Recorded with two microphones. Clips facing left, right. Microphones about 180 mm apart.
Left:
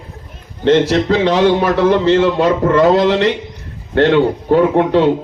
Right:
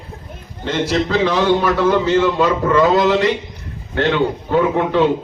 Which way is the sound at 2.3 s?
50° left (ahead or behind).